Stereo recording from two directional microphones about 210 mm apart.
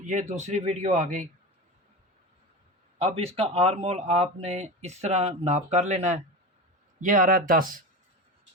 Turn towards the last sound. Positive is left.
turn(degrees=-40)  # may be behind; listen again after turning